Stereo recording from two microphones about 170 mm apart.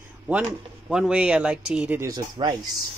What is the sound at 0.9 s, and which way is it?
Speech, 5° right (ahead or behind).